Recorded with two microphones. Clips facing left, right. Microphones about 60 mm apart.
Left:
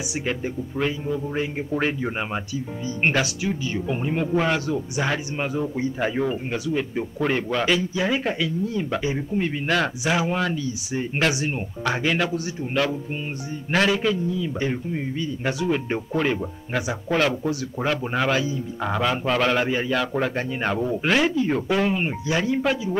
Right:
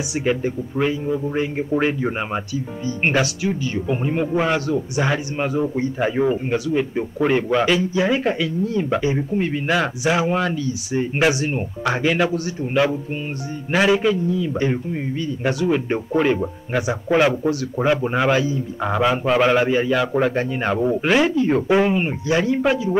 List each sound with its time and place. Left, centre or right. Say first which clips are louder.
0.2 s a man's voice: right 7 dB; centre
13.7 s a man's voice: right 4 dB; centre
21.6 s speech: right 5 dB; right
21.9 s a man's voice: right 4 dB; centre